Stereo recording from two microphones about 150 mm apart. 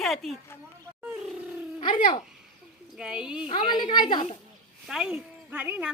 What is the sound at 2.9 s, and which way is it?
Speech, 5° right (ahead or behind).